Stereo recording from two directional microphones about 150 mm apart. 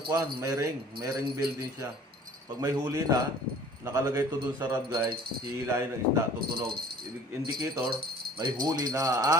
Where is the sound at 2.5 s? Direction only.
25° right (ahead or behind).